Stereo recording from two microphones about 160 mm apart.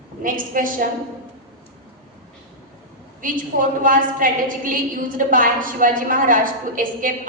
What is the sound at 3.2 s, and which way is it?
A woman's voice, 55° right (ahead or behind).